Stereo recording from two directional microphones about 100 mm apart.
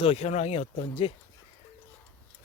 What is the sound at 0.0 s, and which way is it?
Speech, 85° left.